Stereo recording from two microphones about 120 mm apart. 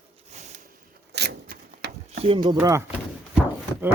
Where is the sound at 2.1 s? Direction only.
55° right (ahead or behind).